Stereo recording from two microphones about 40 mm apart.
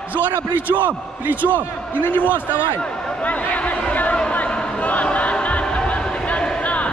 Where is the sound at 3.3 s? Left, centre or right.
Left.